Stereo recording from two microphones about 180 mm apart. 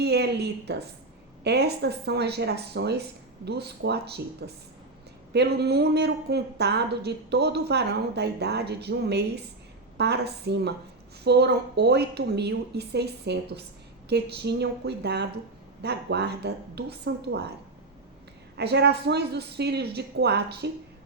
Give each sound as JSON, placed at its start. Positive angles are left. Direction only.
{"t": 0.0, "sound": "a woman's voice", "side_deg": -65}
{"t": 18.5, "sound": "a woman's voice", "side_deg": -65}